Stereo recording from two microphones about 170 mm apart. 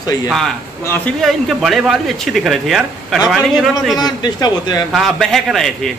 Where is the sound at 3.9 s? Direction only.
25° left (ahead or behind).